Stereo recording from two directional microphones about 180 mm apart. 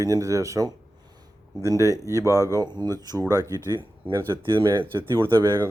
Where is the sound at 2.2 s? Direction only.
15° left (ahead or behind).